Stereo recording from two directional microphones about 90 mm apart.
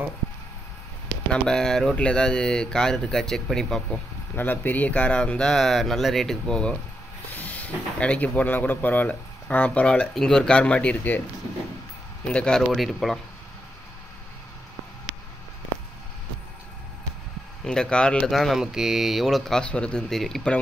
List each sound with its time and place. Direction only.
1.3 s speech: 5° left (ahead or behind)
4.4 s speech: 20° left (ahead or behind)
7.4 s speech: 15° left (ahead or behind)
12.3 s speech: 10° left (ahead or behind)
17.6 s speech: 10° left (ahead or behind)